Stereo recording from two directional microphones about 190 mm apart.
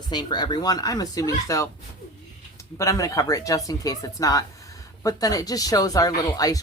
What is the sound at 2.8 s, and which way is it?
Speech, 15° left (ahead or behind).